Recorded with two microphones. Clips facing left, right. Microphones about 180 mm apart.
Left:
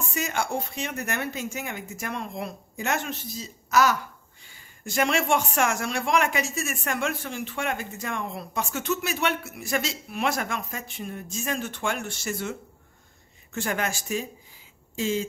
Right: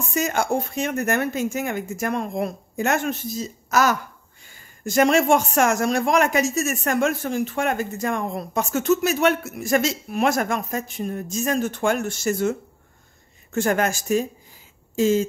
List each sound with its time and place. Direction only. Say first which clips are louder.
0.1 s speech: right 7 dB; 45° right (ahead or behind)